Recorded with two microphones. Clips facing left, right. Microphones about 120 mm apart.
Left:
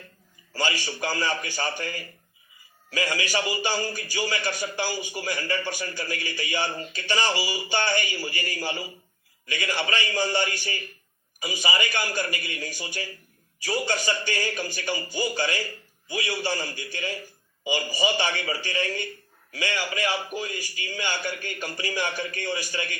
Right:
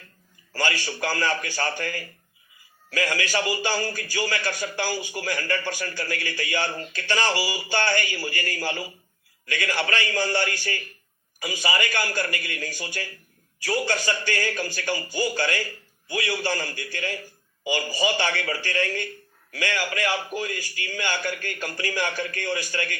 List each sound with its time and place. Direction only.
0.5 s a man's voice: 15° left (ahead or behind)